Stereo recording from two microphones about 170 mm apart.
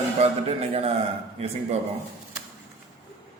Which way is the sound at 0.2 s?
35° right (ahead or behind).